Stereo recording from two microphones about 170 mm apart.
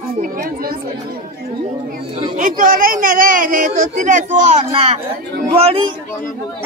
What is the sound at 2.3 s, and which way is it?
A man's voice, 50° right (ahead or behind).